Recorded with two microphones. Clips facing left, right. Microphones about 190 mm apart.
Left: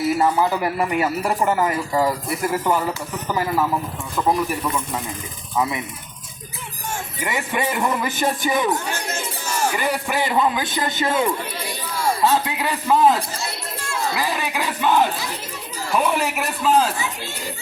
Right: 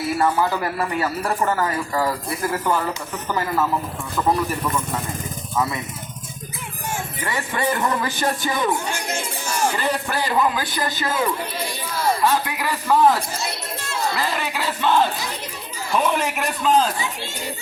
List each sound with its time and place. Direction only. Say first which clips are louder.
0.2 s a man's voice: left 1 dB; 15° left (ahead or behind)
7.2 s a man's voice: left 2 dB; 20° left (ahead or behind)
8.7 s speech: even; 10° right (ahead or behind)
9.7 s a man's voice: left 1 dB; 15° left (ahead or behind)